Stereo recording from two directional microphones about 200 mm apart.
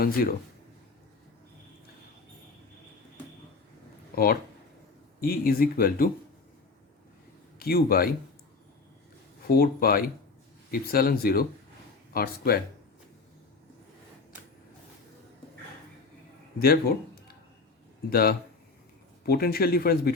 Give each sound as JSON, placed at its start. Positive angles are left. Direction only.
{"t": 0.0, "sound": "speech", "side_deg": 50}
{"t": 4.1, "sound": "speech", "side_deg": 50}
{"t": 7.6, "sound": "speech", "side_deg": 50}
{"t": 9.6, "sound": "speech", "side_deg": 50}
{"t": 16.6, "sound": "speech", "side_deg": 50}
{"t": 18.1, "sound": "speech", "side_deg": 50}